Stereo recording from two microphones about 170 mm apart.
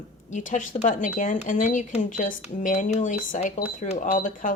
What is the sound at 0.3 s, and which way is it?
Speech, 50° left (ahead or behind).